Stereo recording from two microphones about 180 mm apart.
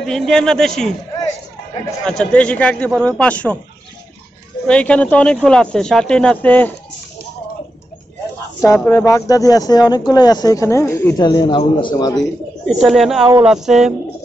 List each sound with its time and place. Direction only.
0.0 s speech: centre (ahead or behind)
2.0 s a man's voice: 5° left (ahead or behind)
4.6 s speech: 5° left (ahead or behind)
8.7 s speech: 5° left (ahead or behind)
9.1 s speech: 20° left (ahead or behind)
12.6 s speech: centre (ahead or behind)